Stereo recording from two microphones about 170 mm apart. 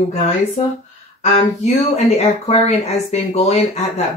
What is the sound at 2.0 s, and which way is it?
Speech, 40° left (ahead or behind).